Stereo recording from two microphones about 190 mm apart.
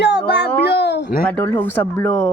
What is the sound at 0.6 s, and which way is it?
Speech, 60° left (ahead or behind).